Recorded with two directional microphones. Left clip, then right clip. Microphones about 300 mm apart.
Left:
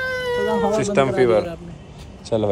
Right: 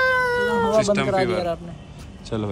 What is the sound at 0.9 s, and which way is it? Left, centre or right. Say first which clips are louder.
Speech: left 4 dB; centre.